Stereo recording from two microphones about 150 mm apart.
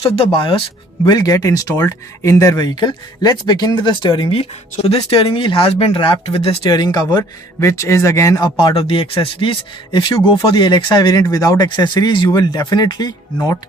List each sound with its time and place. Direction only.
0.0 s speech: 40° left (ahead or behind); by 8.5 s 20° left (ahead or behind)
8.5 s speech: 35° left (ahead or behind)